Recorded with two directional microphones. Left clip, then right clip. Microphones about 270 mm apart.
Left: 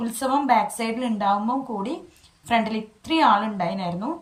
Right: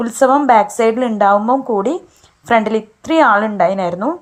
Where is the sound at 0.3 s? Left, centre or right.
Centre.